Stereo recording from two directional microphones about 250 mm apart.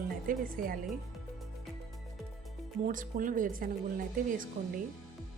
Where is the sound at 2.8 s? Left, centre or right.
Right.